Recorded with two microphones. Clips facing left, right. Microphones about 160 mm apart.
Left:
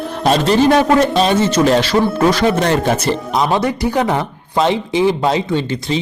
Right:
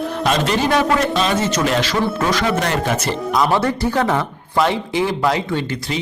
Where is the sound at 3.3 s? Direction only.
20° left (ahead or behind).